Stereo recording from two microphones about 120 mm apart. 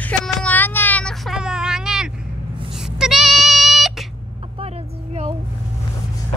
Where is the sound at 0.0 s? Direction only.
10° left (ahead or behind).